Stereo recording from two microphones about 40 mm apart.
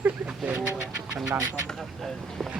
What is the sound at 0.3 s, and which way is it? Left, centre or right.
Bird, right.